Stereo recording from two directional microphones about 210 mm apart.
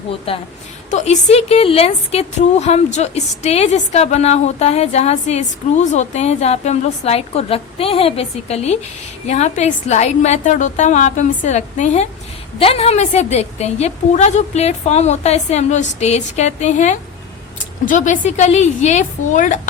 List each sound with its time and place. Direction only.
0.3 s a woman's voice: 25° left (ahead or behind)